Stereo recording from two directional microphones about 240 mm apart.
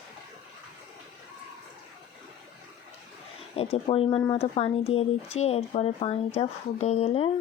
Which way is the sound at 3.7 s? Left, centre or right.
Left.